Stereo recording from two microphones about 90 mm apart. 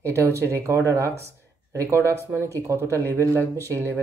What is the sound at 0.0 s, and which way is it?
Speech, 35° right (ahead or behind).